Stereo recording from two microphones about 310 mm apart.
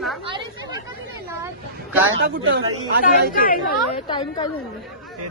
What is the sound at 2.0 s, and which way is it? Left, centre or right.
Speech, right.